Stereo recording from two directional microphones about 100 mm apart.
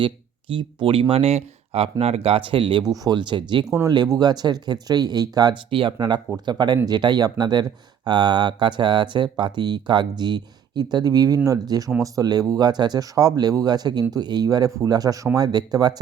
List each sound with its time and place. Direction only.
0.0 s speech: 55° right (ahead or behind)
2.8 s speech: 40° right (ahead or behind)
3.7 s speech: 35° right (ahead or behind)